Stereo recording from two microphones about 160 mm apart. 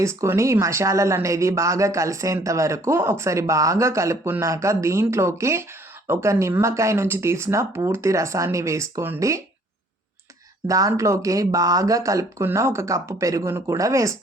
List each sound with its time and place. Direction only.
0.0 s speech: 20° right (ahead or behind)
10.7 s speech: 20° right (ahead or behind)